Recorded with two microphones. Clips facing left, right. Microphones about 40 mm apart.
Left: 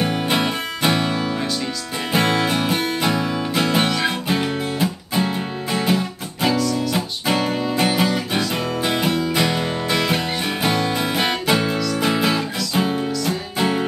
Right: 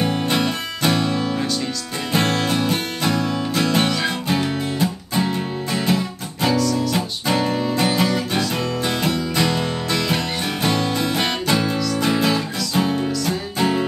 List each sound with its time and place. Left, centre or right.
0.0 s music: centre